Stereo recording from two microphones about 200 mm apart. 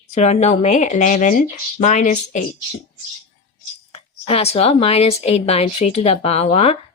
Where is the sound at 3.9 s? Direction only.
30° left (ahead or behind).